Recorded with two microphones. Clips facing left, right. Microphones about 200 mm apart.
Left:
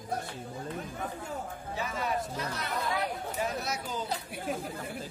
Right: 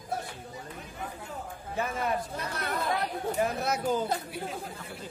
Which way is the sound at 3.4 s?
55° right (ahead or behind).